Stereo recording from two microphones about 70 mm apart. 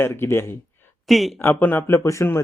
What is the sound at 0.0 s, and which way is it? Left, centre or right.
Speech, left.